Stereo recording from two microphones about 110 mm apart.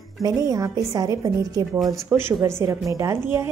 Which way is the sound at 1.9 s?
20° right (ahead or behind).